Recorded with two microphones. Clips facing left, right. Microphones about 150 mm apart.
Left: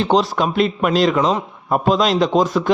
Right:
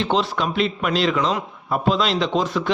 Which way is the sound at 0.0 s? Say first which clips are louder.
Left 5 dB; 40° left (ahead or behind).